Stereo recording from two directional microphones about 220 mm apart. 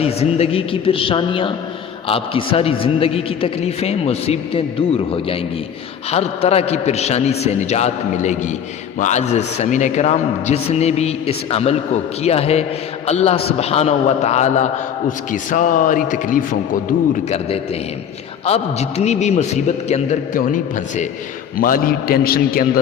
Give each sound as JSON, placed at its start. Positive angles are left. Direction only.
{"t": 0.0, "sound": "a man's voice", "side_deg": 25}